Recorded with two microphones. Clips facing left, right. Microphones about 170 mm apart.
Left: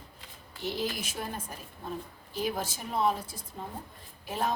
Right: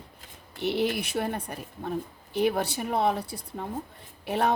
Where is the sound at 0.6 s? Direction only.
65° right (ahead or behind).